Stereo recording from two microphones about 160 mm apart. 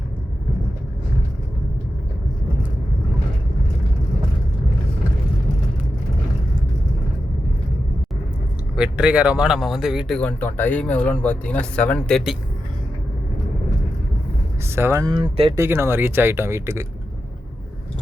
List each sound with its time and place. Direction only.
8.7 s speech: 5° right (ahead or behind)
10.2 s speech: 10° left (ahead or behind)
14.8 s speech: 15° right (ahead or behind)
15.1 s speech: 35° right (ahead or behind)
15.5 s speech: 15° right (ahead or behind)